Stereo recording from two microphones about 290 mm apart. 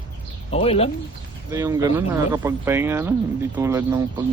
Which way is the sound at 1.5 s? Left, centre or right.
Centre.